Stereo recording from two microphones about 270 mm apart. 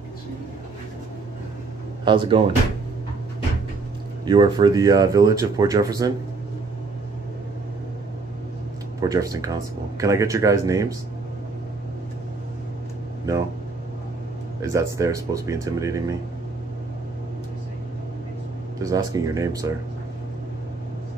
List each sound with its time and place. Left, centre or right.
2.0 s speech: centre
4.3 s speech: centre
9.0 s speech: centre
14.6 s speech: centre
18.8 s speech: centre